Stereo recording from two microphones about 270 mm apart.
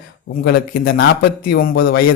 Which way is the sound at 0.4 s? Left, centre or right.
Left.